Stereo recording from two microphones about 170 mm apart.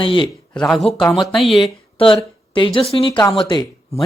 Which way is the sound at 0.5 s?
5° left (ahead or behind).